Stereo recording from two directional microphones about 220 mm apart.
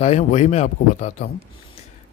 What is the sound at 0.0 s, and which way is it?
A man's voice, 30° left (ahead or behind).